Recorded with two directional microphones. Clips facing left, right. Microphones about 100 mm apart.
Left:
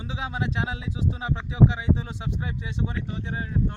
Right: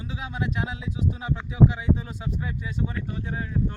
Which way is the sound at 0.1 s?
25° left (ahead or behind).